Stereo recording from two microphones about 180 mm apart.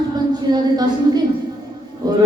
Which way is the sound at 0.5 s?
20° right (ahead or behind).